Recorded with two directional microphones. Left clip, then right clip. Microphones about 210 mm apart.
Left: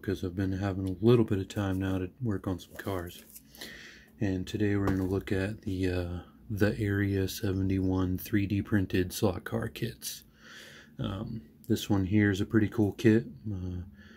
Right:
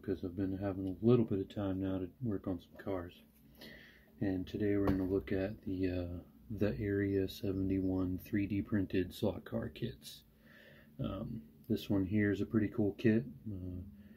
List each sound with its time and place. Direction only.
0.0 s speech: 50° left (ahead or behind)
11.0 s speech: 45° left (ahead or behind)